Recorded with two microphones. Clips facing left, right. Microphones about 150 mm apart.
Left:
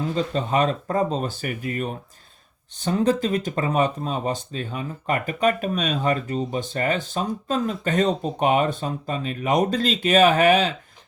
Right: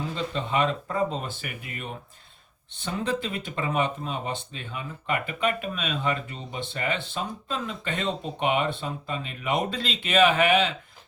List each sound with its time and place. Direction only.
0.3 s speech: 40° left (ahead or behind)